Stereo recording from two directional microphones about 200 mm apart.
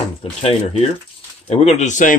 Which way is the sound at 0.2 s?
30° left (ahead or behind).